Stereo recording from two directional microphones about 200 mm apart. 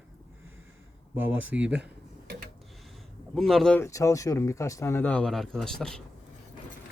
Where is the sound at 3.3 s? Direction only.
Centre (ahead or behind).